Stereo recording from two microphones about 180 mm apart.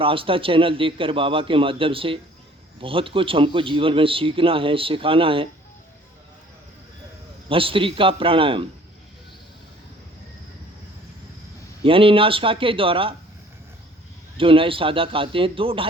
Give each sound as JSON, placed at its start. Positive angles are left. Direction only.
{"t": 0.0, "sound": "speech", "side_deg": -30}
{"t": 7.5, "sound": "speech", "side_deg": -30}
{"t": 11.8, "sound": "speech", "side_deg": -30}
{"t": 14.3, "sound": "speech", "side_deg": -30}